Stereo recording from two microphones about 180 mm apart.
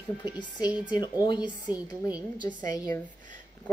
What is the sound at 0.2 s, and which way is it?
Speech, 25° left (ahead or behind).